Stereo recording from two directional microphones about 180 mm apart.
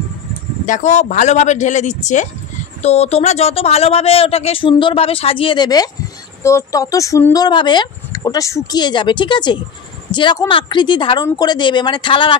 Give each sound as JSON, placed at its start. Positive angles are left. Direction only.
{"t": 0.7, "sound": "speech", "side_deg": 45}